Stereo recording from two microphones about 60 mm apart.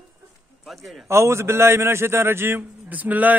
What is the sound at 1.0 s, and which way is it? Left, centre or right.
A man's voice, right.